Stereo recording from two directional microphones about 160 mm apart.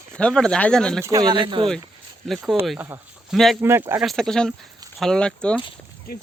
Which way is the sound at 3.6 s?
15° right (ahead or behind).